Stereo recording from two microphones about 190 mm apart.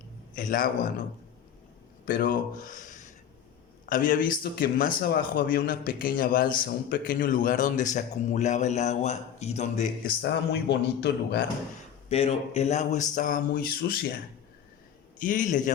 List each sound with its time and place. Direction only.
0.3 s speech: 45° left (ahead or behind)
2.0 s speech: 45° left (ahead or behind)
10.2 s a man's voice: 65° left (ahead or behind)
12.0 s speech: 30° left (ahead or behind); by 14.1 s 55° left (ahead or behind)
15.2 s speech: 45° left (ahead or behind)